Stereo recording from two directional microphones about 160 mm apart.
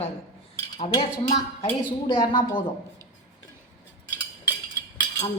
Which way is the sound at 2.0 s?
30° left (ahead or behind).